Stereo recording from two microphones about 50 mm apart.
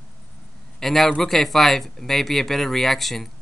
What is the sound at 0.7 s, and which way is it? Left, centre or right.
Speech, centre.